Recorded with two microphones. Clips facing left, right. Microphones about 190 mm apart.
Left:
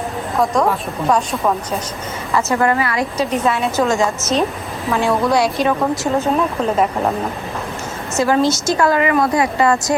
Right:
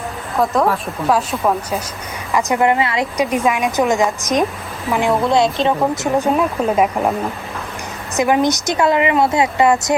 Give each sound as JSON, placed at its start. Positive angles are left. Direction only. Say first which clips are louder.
{"t": 0.3, "sound": "a woman's voice", "louder": "right 1 dB", "side_deg": 0}
{"t": 2.3, "sound": "a woman's voice", "louder": "right 1 dB", "side_deg": -15}
{"t": 3.2, "sound": "a woman's voice", "louder": "right 1 dB", "side_deg": -10}
{"t": 8.1, "sound": "a woman's voice", "louder": "even", "side_deg": -15}